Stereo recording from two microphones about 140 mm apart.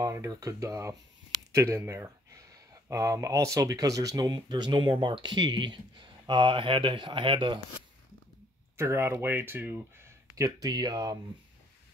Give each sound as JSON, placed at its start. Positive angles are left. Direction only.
{"t": 0.0, "sound": "speech", "side_deg": -25}
{"t": 8.7, "sound": "speech", "side_deg": -20}